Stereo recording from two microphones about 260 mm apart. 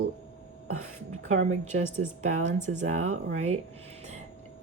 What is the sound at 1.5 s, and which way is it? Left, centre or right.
Speech, right.